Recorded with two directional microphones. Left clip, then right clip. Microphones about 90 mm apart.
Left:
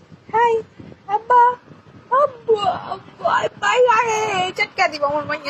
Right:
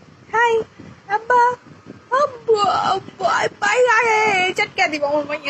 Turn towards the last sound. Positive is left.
turn(degrees=-35)  # may be behind; listen again after turning